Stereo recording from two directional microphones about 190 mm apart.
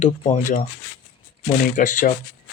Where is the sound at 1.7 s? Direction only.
45° left (ahead or behind).